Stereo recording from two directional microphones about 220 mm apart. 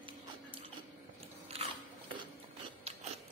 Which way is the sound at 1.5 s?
30° right (ahead or behind).